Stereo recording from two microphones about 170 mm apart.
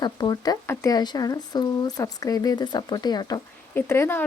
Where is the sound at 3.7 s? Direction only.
10° left (ahead or behind).